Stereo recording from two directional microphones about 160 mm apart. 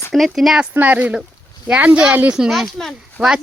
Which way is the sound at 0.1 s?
Centre (ahead or behind).